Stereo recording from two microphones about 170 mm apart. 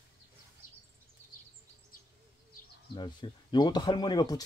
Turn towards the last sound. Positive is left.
turn(degrees=25)  # may be behind; listen again after turning